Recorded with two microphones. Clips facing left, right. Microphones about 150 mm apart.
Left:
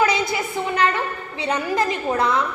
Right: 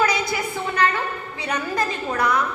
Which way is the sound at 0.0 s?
20° left (ahead or behind).